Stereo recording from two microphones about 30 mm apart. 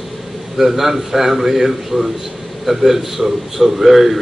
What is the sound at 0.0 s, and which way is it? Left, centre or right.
A man's voice, centre.